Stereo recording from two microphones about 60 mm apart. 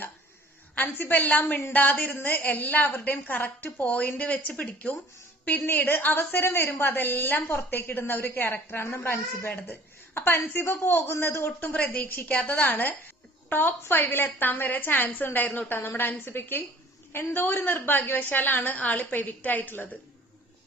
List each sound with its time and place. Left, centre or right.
0.8 s a woman's voice: left
11.7 s a woman's voice: left